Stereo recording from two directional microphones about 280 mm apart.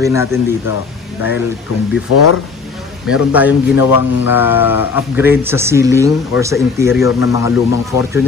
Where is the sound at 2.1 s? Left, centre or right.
Left.